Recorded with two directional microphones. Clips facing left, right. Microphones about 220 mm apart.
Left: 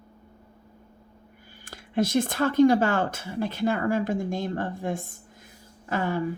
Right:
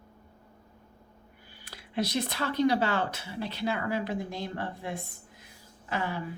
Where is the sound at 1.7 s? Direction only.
50° left (ahead or behind).